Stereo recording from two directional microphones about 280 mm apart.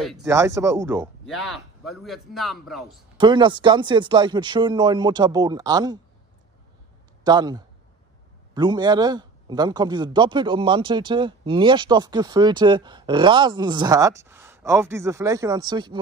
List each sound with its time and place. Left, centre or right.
0.0 s a man's voice: centre
3.2 s a man's voice: centre
7.2 s a man's voice: centre